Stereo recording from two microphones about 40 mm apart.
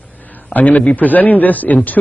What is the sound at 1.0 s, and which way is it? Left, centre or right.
A man's voice, left.